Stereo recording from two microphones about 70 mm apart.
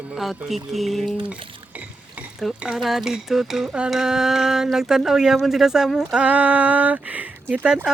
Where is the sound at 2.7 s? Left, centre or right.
Centre.